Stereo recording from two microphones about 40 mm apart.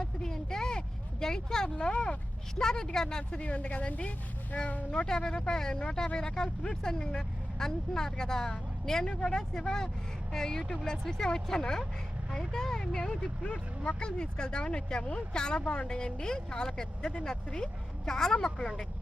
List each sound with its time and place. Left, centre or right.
0.0 s vehicle: centre
1.2 s speech: centre
1.7 s speech: left
2.6 s speech: centre
3.4 s speech: left
4.5 s speech: left
4.9 s speech: left